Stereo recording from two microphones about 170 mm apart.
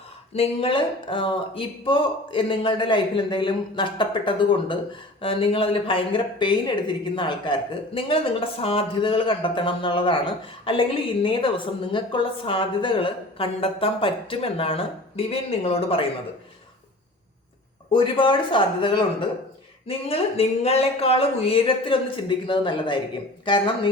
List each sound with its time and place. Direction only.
0.3 s speech: 30° left (ahead or behind)
17.9 s speech: 30° left (ahead or behind)